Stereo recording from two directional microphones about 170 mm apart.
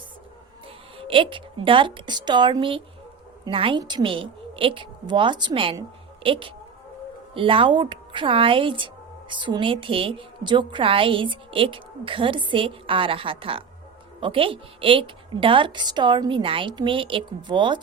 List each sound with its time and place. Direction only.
0.9 s a woman's voice: 30° right (ahead or behind)